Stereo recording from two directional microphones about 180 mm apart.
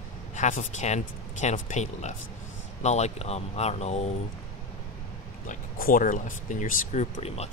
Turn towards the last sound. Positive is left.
turn(degrees=40)  # may be behind; listen again after turning